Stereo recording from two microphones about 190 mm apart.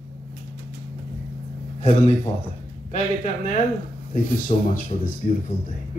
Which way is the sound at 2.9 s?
40° left (ahead or behind).